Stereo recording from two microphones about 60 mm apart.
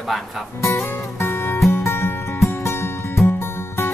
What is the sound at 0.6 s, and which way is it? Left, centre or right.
Speech, left.